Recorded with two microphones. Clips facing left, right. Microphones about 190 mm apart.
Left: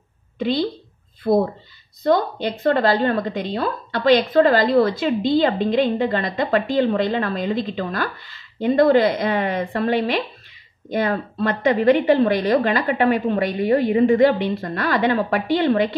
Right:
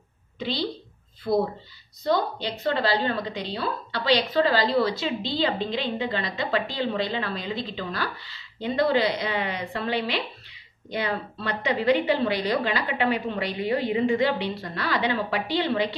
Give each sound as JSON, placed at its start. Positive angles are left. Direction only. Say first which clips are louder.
{"t": 0.4, "sound": "a woman's voice", "louder": "left 8 dB", "side_deg": 50}